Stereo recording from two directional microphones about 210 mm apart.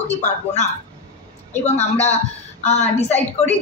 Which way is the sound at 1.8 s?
30° left (ahead or behind).